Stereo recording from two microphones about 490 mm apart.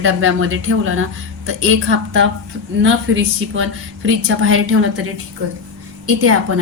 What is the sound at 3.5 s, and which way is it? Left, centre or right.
A woman's voice, right.